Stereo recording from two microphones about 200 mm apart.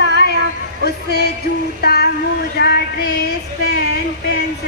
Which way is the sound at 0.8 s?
55° left (ahead or behind).